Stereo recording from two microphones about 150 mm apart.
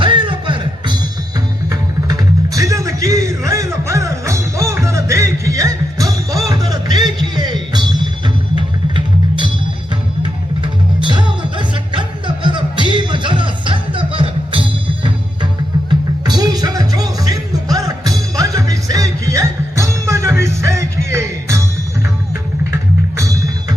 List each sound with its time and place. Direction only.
0.0 s music: 35° right (ahead or behind)
10.2 s music: 30° right (ahead or behind)
23.1 s music: 20° right (ahead or behind)